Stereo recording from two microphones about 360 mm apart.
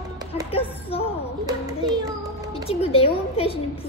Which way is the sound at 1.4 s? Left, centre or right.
Centre.